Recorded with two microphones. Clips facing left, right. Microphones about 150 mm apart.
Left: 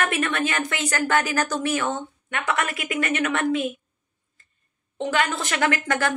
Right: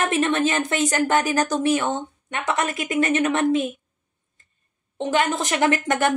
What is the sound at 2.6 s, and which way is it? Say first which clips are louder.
Speech: right 4 dB; 35° right (ahead or behind).